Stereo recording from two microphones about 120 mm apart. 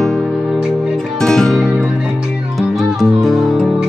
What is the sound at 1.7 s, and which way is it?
Music, 10° right (ahead or behind).